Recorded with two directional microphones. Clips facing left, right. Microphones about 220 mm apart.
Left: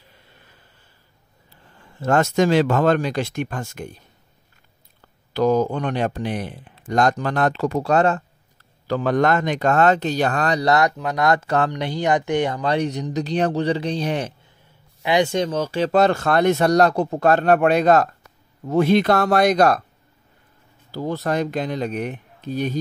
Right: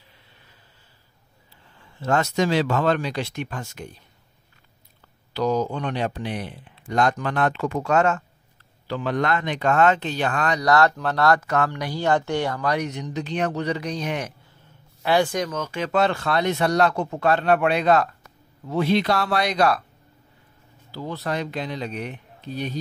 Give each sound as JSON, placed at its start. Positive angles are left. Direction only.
{"t": 1.8, "sound": "speech", "side_deg": 50}
{"t": 5.3, "sound": "speech", "side_deg": 50}
{"t": 11.0, "sound": "speech", "side_deg": 15}
{"t": 11.4, "sound": "speech", "side_deg": 30}
{"t": 11.7, "sound": "speech", "side_deg": 20}
{"t": 20.9, "sound": "speech", "side_deg": 45}